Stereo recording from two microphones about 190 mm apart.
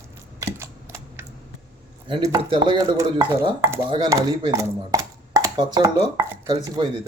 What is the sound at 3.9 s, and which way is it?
Speech, 25° right (ahead or behind).